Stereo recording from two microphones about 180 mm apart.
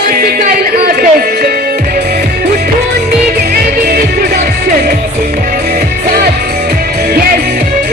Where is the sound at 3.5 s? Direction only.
55° right (ahead or behind).